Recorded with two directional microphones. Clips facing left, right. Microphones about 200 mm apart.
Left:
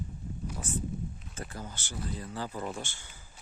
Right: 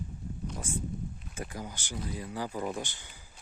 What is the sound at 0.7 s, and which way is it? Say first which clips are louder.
Speech: left 2 dB; 10° right (ahead or behind).